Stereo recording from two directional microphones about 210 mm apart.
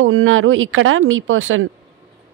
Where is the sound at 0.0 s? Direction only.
75° right (ahead or behind).